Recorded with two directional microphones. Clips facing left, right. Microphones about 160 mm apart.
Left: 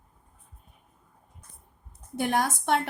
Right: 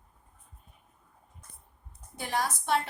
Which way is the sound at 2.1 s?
55° left (ahead or behind).